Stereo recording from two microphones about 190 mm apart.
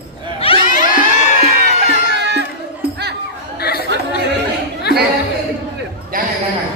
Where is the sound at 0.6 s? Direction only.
45° left (ahead or behind).